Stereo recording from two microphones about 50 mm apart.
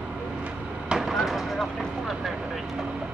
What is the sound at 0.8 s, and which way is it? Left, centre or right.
Vehicle, centre.